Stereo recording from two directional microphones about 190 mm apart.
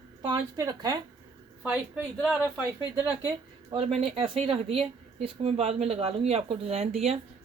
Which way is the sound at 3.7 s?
30° right (ahead or behind).